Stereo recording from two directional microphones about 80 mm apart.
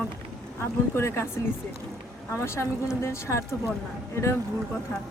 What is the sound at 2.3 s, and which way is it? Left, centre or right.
A woman's voice, left.